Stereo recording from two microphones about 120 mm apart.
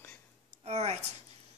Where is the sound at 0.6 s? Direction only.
60° right (ahead or behind).